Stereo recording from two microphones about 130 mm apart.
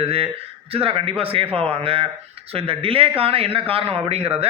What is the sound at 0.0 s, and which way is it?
A man's voice, 50° right (ahead or behind).